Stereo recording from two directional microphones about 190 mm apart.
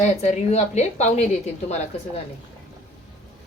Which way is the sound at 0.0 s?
35° left (ahead or behind).